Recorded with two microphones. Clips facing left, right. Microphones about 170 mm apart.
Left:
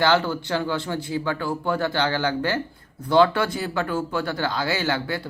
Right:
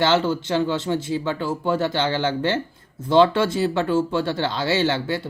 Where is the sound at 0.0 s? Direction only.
20° right (ahead or behind).